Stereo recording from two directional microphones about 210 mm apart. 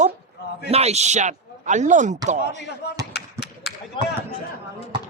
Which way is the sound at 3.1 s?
55° left (ahead or behind).